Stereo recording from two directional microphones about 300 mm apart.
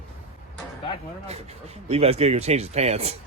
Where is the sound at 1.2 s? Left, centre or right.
Right.